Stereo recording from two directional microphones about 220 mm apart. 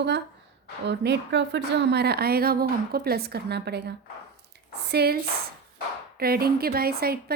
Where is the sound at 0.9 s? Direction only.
50° right (ahead or behind).